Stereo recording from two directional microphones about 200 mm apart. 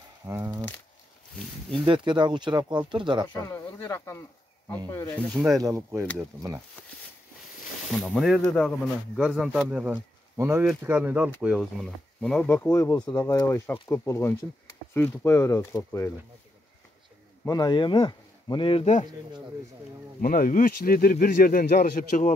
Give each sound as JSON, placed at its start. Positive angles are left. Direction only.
{"t": 0.3, "sound": "speech", "side_deg": -15}
{"t": 1.9, "sound": "speech", "side_deg": -25}
{"t": 3.4, "sound": "speech", "side_deg": 15}
{"t": 5.5, "sound": "speech", "side_deg": -15}
{"t": 7.9, "sound": "speech", "side_deg": 0}
{"t": 17.5, "sound": "speech", "side_deg": 20}
{"t": 20.2, "sound": "speech", "side_deg": 45}